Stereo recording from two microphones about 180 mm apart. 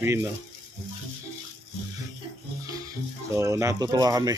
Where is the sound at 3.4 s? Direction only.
15° right (ahead or behind).